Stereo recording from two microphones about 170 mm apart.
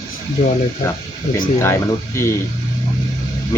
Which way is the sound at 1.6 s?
15° left (ahead or behind).